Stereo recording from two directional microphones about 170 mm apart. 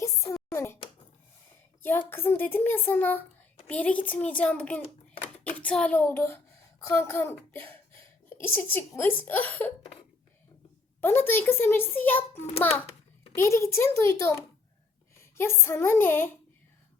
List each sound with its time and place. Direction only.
0.0 s a sound: 15° left (ahead or behind)
1.8 s a child's voice: 10° left (ahead or behind)
11.0 s a child's voice: 15° left (ahead or behind)